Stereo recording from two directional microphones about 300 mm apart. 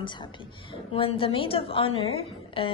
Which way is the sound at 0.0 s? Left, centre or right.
Centre.